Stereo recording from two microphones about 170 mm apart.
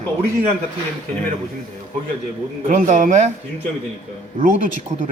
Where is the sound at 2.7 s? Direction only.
45° right (ahead or behind).